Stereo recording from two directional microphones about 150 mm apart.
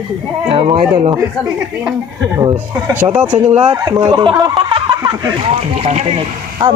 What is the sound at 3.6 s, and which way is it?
Speech, 25° right (ahead or behind).